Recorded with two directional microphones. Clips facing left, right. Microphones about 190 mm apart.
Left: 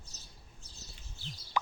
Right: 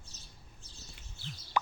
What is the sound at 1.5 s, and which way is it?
Fowl, 55° right (ahead or behind).